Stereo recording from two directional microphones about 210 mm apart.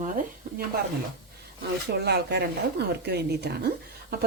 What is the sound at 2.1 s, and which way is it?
Speech, 55° right (ahead or behind).